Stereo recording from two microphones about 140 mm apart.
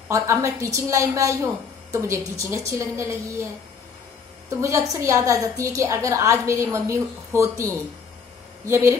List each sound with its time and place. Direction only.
0.1 s a woman's voice: 20° right (ahead or behind)
4.6 s a woman's voice: 20° right (ahead or behind)